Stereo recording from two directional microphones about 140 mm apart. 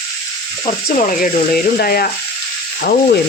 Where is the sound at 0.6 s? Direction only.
60° left (ahead or behind).